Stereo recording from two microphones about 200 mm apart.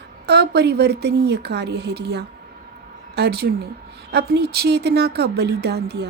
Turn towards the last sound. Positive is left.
turn(degrees=-55)  # may be behind; listen again after turning